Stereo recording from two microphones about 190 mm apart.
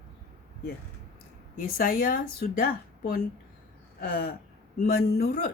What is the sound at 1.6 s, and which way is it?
A woman's voice, 50° left (ahead or behind).